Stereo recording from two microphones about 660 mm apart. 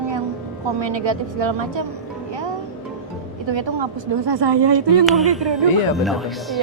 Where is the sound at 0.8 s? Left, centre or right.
Right.